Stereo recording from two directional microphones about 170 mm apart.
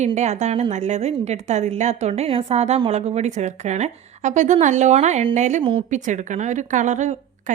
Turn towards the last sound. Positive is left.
turn(degrees=-45)  # may be behind; listen again after turning